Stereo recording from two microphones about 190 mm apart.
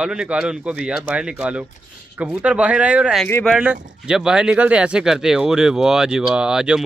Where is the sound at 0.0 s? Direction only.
5° right (ahead or behind).